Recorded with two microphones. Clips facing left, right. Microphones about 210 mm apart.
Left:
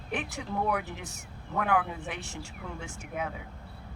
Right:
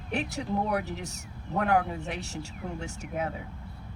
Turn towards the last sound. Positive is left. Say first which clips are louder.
# right 3 dB
turn(degrees=-40)  # may be behind; listen again after turning